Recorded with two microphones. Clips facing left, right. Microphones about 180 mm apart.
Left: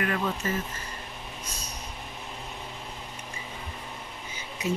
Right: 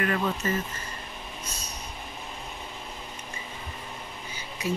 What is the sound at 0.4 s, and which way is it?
Speech, 10° left (ahead or behind).